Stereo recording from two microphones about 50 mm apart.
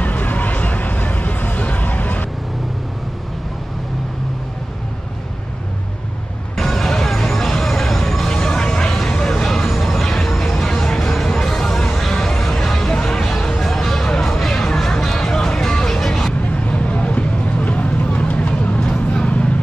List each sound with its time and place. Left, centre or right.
0.0 s music: left
6.5 s music: centre
16.4 s a sound: left